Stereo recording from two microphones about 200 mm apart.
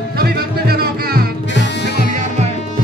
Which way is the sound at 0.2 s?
50° right (ahead or behind).